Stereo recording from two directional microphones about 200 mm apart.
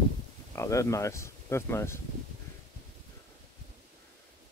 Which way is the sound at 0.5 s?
15° left (ahead or behind).